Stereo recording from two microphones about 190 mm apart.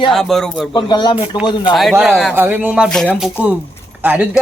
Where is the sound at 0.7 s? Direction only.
25° left (ahead or behind).